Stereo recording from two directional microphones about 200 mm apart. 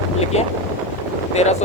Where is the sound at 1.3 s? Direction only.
35° left (ahead or behind).